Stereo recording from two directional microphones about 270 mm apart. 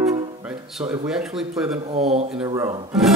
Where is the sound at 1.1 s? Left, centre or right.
Centre.